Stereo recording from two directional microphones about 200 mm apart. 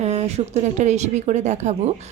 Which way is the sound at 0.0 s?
30° right (ahead or behind).